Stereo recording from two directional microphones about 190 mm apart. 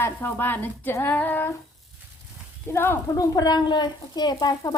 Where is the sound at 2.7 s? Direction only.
15° left (ahead or behind).